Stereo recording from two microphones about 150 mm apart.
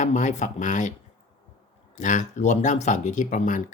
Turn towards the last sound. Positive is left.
turn(degrees=55)  # may be behind; listen again after turning